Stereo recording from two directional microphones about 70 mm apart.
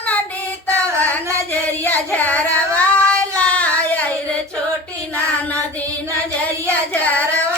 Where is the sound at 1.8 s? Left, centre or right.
Left.